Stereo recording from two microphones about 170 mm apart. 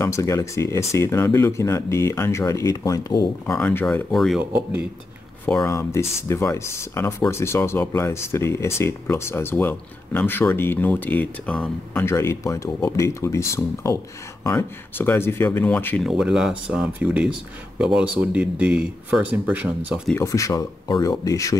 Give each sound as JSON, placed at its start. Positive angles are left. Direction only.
{"t": 0.0, "sound": "speech", "side_deg": 20}
{"t": 3.5, "sound": "speech", "side_deg": 10}
{"t": 4.5, "sound": "speech", "side_deg": -10}
{"t": 5.4, "sound": "speech", "side_deg": 15}
{"t": 16.1, "sound": "speech", "side_deg": -5}
{"t": 20.2, "sound": "speech", "side_deg": 20}